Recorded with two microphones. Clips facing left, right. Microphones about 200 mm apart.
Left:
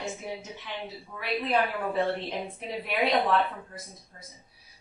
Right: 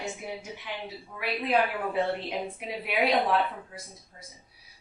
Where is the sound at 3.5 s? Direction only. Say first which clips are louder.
Even; 10° right (ahead or behind).